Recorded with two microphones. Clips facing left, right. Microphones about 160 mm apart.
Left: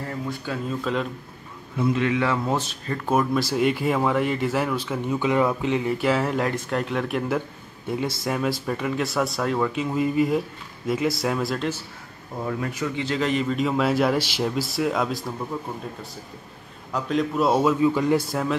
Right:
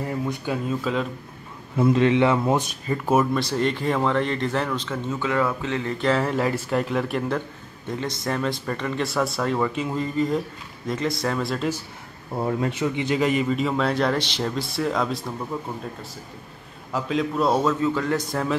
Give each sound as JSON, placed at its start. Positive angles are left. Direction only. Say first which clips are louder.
{"t": 0.0, "sound": "a man's voice", "louder": "right 3 dB", "side_deg": -15}
{"t": 0.9, "sound": "speech", "louder": "even", "side_deg": 0}
{"t": 1.8, "sound": "speech", "louder": "right 4 dB", "side_deg": -30}
{"t": 12.4, "sound": "speech", "louder": "right 3 dB", "side_deg": -30}
{"t": 16.9, "sound": "speech", "louder": "even", "side_deg": 0}
{"t": 18.3, "sound": "speech", "louder": "even", "side_deg": 0}